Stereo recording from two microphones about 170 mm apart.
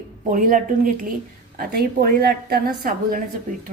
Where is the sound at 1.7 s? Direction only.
60° right (ahead or behind).